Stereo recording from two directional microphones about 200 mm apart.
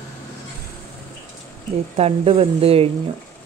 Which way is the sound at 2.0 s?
30° right (ahead or behind).